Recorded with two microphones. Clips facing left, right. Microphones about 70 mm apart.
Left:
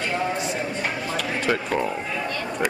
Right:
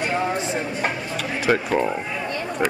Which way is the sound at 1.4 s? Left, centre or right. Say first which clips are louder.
Right 5 dB; centre.